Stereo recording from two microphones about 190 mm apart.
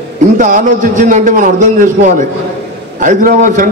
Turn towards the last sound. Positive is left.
turn(degrees=-45)  # may be behind; listen again after turning